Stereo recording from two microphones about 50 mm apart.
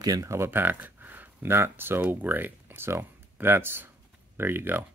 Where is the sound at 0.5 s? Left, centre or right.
Right.